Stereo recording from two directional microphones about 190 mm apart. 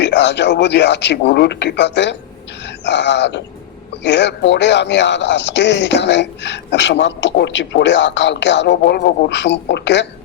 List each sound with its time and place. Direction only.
0.0 s speech: 65° left (ahead or behind)
2.6 s a sound: 65° left (ahead or behind)
4.0 s speech: 65° left (ahead or behind)